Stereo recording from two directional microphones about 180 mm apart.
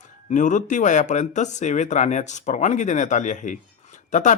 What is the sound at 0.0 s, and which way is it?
Speech, 45° left (ahead or behind).